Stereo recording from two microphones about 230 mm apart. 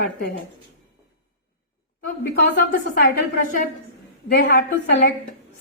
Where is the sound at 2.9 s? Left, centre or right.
Left.